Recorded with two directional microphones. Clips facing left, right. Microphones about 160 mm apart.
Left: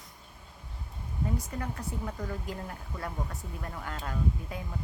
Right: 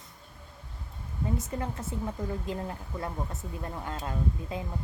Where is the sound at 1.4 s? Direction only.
25° right (ahead or behind).